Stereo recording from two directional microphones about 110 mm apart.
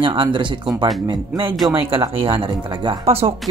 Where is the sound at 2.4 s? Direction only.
45° right (ahead or behind).